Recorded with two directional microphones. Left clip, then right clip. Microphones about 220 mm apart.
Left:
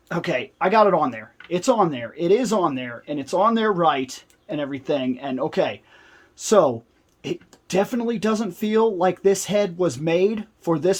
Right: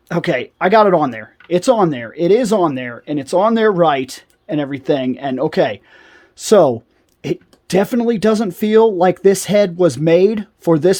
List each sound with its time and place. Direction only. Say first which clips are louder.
0.1 s speech: right 6 dB; 50° right (ahead or behind)